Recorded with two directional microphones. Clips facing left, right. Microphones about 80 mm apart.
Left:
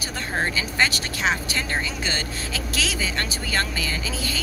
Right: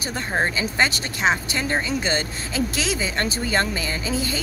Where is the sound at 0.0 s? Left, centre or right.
Right.